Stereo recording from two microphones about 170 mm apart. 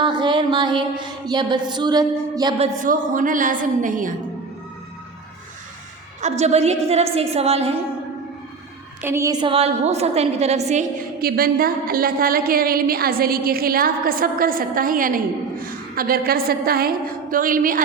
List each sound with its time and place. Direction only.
0.0 s a sound: 25° right (ahead or behind)
2.6 s a woman's voice: 50° right (ahead or behind)
6.2 s a woman's voice: 40° right (ahead or behind)
9.0 s a woman's voice: 15° right (ahead or behind); by 10.8 s 40° right (ahead or behind)
11.2 s a woman's voice: 60° right (ahead or behind)